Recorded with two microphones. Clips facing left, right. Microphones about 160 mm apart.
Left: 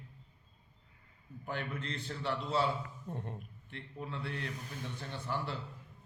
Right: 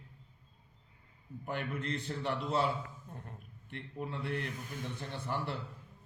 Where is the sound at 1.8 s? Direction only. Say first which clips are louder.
Right 4 dB; 55° right (ahead or behind).